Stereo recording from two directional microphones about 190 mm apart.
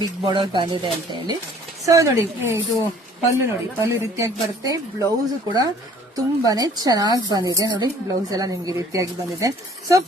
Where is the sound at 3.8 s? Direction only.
15° right (ahead or behind).